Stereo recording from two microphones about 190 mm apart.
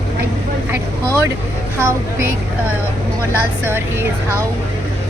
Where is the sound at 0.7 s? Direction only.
15° right (ahead or behind).